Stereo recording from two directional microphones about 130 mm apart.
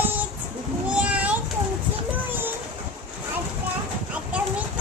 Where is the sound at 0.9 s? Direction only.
10° right (ahead or behind).